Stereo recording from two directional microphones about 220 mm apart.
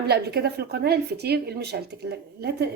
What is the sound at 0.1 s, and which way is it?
A woman's voice, 50° right (ahead or behind).